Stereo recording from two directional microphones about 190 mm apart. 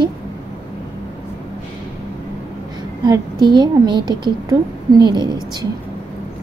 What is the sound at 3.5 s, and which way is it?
Speech, 25° right (ahead or behind).